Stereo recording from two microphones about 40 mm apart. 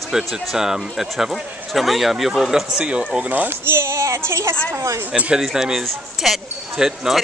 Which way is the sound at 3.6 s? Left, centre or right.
Right.